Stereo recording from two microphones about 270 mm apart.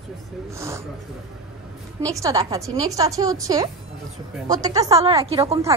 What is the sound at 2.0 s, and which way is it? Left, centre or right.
A woman's voice, centre.